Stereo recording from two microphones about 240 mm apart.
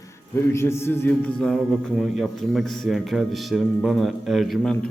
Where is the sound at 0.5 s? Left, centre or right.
Centre.